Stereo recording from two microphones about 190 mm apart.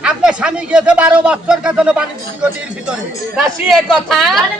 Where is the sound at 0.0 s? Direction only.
5° right (ahead or behind).